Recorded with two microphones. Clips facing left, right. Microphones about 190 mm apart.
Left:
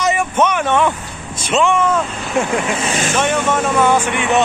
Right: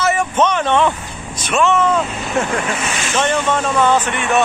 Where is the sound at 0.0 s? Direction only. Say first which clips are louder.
Even; 10° left (ahead or behind).